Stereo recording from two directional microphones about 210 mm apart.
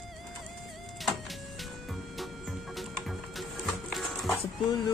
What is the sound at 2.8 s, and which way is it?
Music, centre (ahead or behind).